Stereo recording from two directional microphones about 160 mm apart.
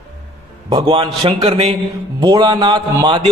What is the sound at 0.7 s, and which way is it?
A man's voice, 35° right (ahead or behind).